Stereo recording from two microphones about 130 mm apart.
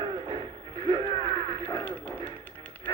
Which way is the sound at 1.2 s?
35° left (ahead or behind).